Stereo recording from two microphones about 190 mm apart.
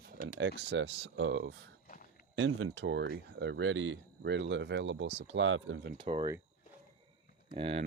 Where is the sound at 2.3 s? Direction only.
90° right; by 5.1 s 70° right (ahead or behind).